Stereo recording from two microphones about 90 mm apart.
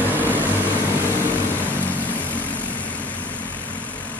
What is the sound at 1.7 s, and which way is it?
Vehicle, 20° left (ahead or behind).